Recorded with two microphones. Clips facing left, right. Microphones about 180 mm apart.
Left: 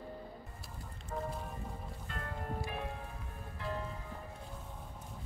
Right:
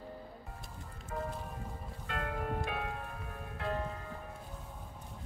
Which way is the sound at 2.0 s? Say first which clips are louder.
Right 6 dB; 80° right.